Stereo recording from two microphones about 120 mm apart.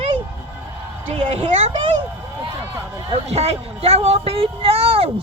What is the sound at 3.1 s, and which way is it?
Speech, 60° right (ahead or behind).